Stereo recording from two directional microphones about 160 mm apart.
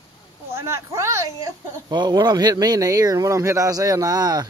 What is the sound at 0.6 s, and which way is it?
Speech, 15° right (ahead or behind).